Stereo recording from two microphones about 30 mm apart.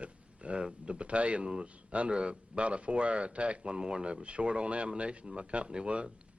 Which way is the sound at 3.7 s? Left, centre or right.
Right.